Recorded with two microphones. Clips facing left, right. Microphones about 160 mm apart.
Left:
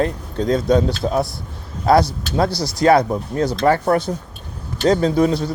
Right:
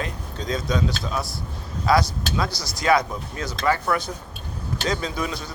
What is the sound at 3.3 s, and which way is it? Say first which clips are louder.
Speech: left 7 dB; 55° left (ahead or behind).